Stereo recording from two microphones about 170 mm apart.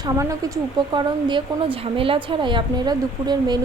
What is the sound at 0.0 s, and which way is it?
Speech, 20° right (ahead or behind).